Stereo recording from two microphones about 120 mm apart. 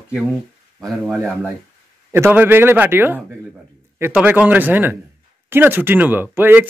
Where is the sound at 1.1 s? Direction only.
Centre (ahead or behind).